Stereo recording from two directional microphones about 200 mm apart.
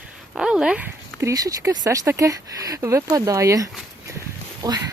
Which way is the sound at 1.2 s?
15° right (ahead or behind).